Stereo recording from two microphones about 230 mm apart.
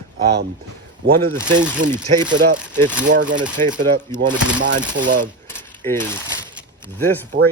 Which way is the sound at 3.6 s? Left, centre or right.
Right.